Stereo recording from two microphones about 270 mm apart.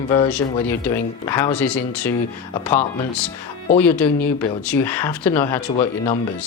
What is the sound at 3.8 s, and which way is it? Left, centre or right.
Speech, centre.